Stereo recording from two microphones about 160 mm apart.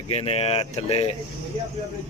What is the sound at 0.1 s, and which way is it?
Speech, 40° left (ahead or behind).